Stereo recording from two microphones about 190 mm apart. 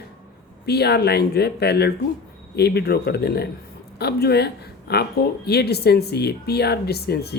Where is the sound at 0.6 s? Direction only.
60° left (ahead or behind).